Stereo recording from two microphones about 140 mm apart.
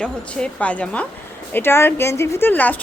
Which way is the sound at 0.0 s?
5° left (ahead or behind).